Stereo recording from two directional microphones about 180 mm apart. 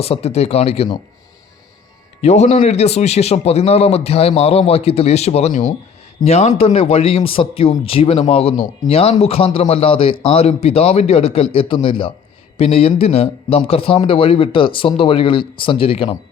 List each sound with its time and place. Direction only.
0.0 s speech: 35° left (ahead or behind)
2.2 s speech: 40° left (ahead or behind)